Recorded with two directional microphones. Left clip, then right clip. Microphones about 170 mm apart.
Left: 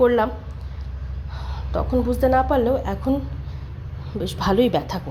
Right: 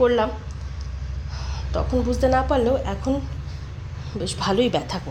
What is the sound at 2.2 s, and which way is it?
Speech, 10° left (ahead or behind).